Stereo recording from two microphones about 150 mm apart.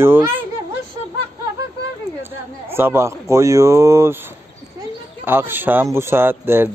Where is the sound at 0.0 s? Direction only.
15° right (ahead or behind).